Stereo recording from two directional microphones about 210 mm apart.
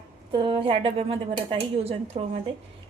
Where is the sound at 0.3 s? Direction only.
25° right (ahead or behind).